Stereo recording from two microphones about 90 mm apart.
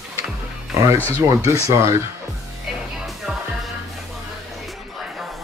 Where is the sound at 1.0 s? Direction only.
20° left (ahead or behind).